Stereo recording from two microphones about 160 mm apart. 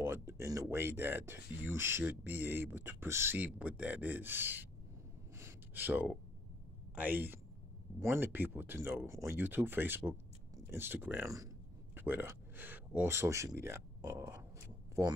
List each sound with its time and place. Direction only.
0.3 s speech: 15° right (ahead or behind)
5.4 s a sound: 10° right (ahead or behind)
7.0 s speech: 10° right (ahead or behind)